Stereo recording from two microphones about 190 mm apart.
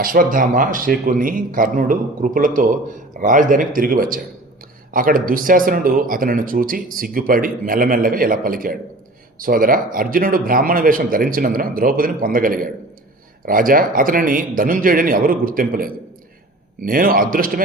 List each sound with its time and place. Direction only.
0.0 s speech: 45° right (ahead or behind)